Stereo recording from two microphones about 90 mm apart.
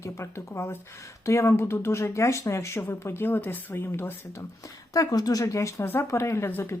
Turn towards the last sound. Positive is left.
turn(degrees=25)  # may be behind; listen again after turning